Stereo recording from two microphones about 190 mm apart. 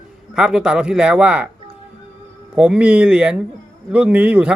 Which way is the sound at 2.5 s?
5° right (ahead or behind).